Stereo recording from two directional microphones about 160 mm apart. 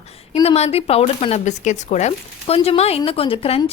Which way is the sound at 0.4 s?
40° left (ahead or behind).